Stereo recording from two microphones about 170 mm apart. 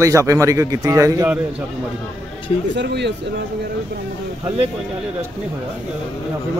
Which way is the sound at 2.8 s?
90° right.